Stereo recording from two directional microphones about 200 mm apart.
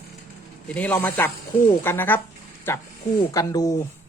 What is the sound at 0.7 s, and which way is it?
Speech, 10° left (ahead or behind).